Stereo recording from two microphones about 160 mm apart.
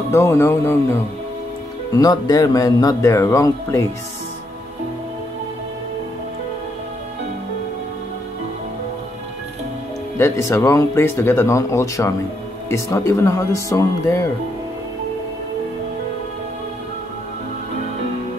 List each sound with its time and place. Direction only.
0.1 s speech: 15° left (ahead or behind)
2.0 s speech: 25° left (ahead or behind)
10.1 s speech: 15° left (ahead or behind)